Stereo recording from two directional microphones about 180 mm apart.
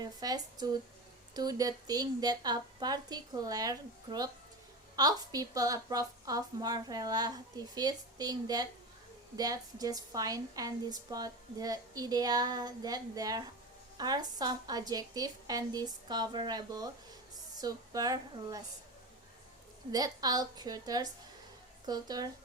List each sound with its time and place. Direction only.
0.0 s a woman's voice: 20° right (ahead or behind)
19.9 s a woman's voice: 20° right (ahead or behind)